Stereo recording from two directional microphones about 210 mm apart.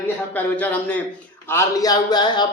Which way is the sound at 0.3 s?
10° left (ahead or behind).